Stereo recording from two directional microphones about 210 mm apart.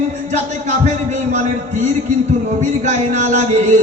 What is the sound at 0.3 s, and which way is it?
A man's voice, 35° right (ahead or behind).